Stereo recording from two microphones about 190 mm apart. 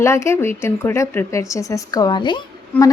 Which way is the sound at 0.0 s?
15° left (ahead or behind).